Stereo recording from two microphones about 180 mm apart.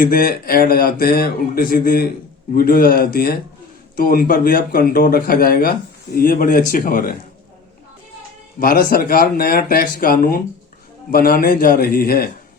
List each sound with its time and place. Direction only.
0.0 s speech: 55° left (ahead or behind)
8.5 s speech: 50° left (ahead or behind)